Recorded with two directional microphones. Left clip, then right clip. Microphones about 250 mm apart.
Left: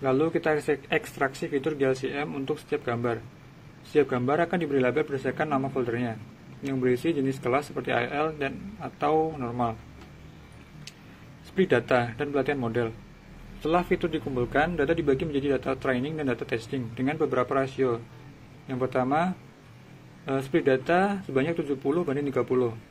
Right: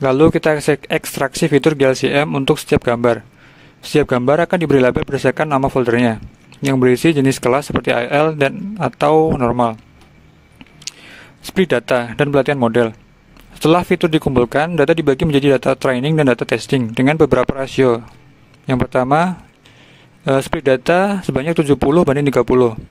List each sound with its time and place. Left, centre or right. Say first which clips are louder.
0.0 s speech: right 12 dB; right
11.5 s speech: right 8 dB; right